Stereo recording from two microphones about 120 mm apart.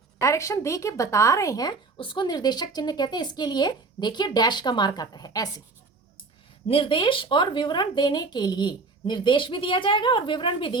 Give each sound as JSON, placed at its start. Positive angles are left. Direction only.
{"t": 0.2, "sound": "speech", "side_deg": 25}
{"t": 6.7, "sound": "a woman's voice", "side_deg": 45}